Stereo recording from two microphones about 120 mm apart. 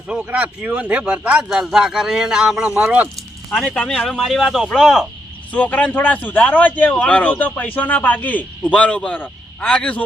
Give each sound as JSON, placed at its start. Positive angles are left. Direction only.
{"t": 0.1, "sound": "speech", "side_deg": -10}
{"t": 3.5, "sound": "a man's voice", "side_deg": 5}
{"t": 5.5, "sound": "a man's voice", "side_deg": 15}